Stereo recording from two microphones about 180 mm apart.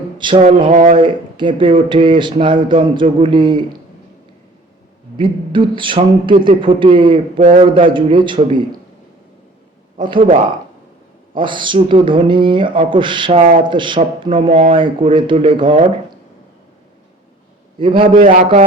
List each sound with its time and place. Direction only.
0.2 s speech: 30° right (ahead or behind)
0.7 s a man's voice: 40° right (ahead or behind)
0.9 s speech: 25° right (ahead or behind)
5.1 s speech: 25° right (ahead or behind)
7.3 s a man's voice: 45° right (ahead or behind)
7.6 s speech: 25° right (ahead or behind)
11.3 s speech: 25° right (ahead or behind)
13.4 s a man's voice: 45° right (ahead or behind)
13.7 s speech: 25° right (ahead or behind)
17.7 s speech: 30° right (ahead or behind)
18.1 s a man's voice: 45° right (ahead or behind)